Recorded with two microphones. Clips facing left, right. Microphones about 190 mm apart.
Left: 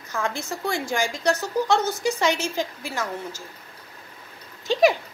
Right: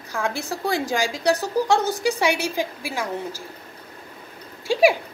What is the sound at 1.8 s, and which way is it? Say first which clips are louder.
Speech: right 2 dB; 35° right (ahead or behind).